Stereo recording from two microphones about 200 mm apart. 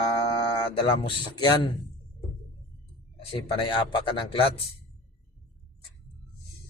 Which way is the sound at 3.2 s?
25° left (ahead or behind).